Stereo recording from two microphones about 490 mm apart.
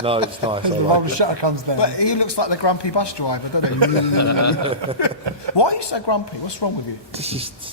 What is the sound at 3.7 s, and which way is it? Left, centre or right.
Speech, right.